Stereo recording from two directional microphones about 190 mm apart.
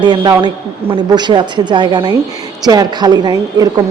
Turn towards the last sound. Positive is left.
turn(degrees=-20)  # may be behind; listen again after turning